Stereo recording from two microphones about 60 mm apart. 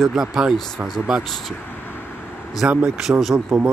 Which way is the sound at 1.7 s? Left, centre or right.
Left.